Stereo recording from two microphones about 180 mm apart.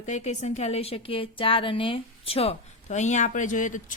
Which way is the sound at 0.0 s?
40° left (ahead or behind).